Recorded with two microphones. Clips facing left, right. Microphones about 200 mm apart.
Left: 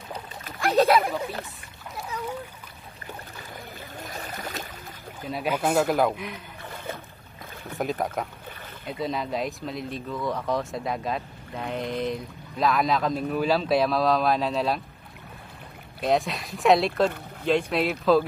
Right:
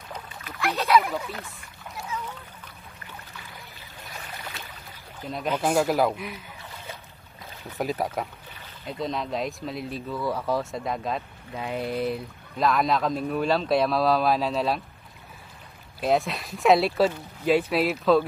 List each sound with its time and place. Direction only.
0.4 s splash: 45° left (ahead or behind)
4.0 s boat: 45° left (ahead or behind)
5.3 s speech: 5° left (ahead or behind)
6.6 s a sound: 55° left (ahead or behind)
7.7 s speech: centre (ahead or behind)
16.0 s speech: centre (ahead or behind)